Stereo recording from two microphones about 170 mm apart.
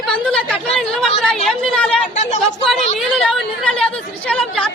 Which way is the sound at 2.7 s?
Centre (ahead or behind).